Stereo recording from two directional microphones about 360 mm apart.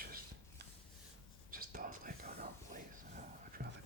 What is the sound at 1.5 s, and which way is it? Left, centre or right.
Whispering, right.